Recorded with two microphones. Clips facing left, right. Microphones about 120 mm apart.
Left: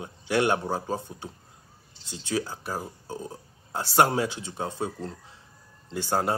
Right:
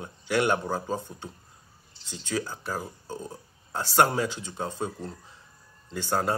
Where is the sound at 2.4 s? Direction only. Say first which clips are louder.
Even; 25° left (ahead or behind).